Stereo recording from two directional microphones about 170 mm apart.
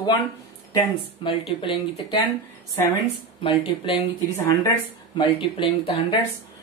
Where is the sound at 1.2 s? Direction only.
35° left (ahead or behind).